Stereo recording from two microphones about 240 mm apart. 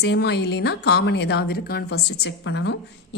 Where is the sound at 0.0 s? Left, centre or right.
Left.